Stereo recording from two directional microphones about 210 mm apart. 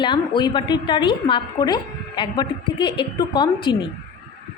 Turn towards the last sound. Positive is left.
turn(degrees=20)  # may be behind; listen again after turning